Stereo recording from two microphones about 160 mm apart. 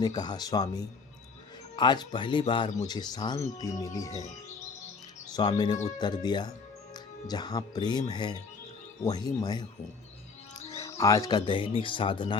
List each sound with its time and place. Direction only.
0.0 s speech: 25° left (ahead or behind)
5.3 s speech: 25° left (ahead or behind)
10.8 s speech: 20° left (ahead or behind)